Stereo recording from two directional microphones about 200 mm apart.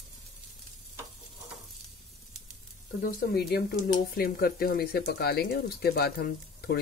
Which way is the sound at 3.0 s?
45° left (ahead or behind).